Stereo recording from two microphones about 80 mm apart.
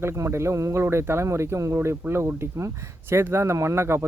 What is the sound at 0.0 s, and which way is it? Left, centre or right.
Speech, right.